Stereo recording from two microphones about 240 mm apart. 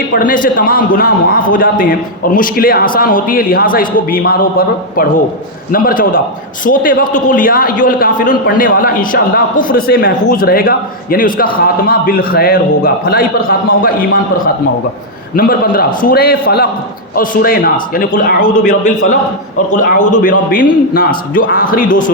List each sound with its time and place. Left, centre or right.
0.1 s a man's voice: left